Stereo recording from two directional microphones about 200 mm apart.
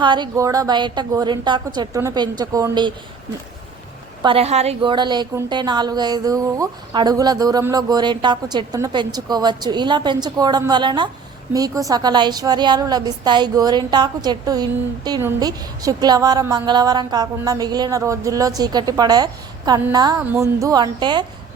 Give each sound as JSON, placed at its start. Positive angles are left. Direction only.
{"t": 0.0, "sound": "a woman's voice", "side_deg": -20}
{"t": 4.2, "sound": "a woman's voice", "side_deg": -25}